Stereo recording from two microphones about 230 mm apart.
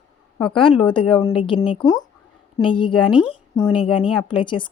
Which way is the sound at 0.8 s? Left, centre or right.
Left.